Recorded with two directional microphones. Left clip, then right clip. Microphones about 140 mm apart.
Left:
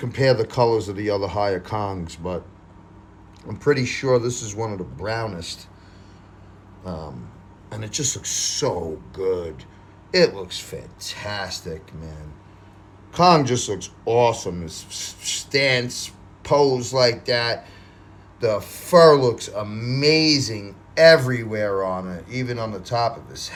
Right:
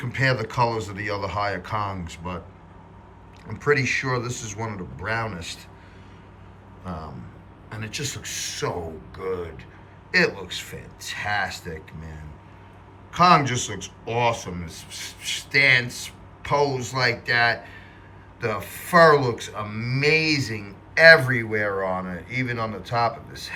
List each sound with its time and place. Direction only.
0.0 s speech: 55° left (ahead or behind)
3.5 s speech: 50° left (ahead or behind); by 5.6 s 30° left (ahead or behind)
7.7 s speech: 65° left (ahead or behind)
10.1 s speech: 45° left (ahead or behind)
13.1 s speech: 45° left (ahead or behind)
21.8 s speech: 30° left (ahead or behind)